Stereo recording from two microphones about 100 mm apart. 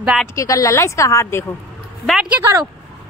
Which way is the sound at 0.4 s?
35° left (ahead or behind).